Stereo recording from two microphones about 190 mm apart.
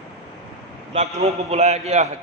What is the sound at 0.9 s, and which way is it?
A man's voice, 35° right (ahead or behind).